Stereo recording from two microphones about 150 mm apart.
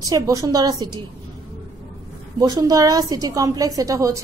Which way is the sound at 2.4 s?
25° right (ahead or behind).